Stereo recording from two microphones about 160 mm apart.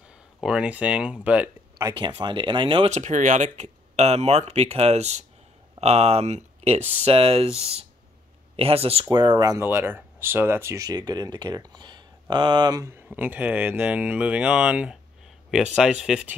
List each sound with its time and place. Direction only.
0.4 s speech: 5° right (ahead or behind)
1.9 s speech: 30° right (ahead or behind)
2.9 s speech: 50° right (ahead or behind); by 9.6 s 25° right (ahead or behind)
9.6 s speech: 15° right (ahead or behind)